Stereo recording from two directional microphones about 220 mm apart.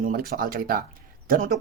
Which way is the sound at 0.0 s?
40° right (ahead or behind).